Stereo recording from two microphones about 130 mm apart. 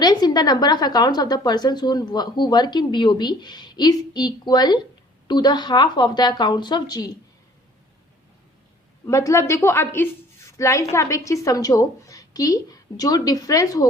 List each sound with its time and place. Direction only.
0.0 s a woman's voice: 30° left (ahead or behind)
9.0 s a woman's voice: 25° left (ahead or behind)